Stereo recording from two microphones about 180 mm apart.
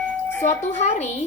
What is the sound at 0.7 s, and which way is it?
Speech, 40° left (ahead or behind).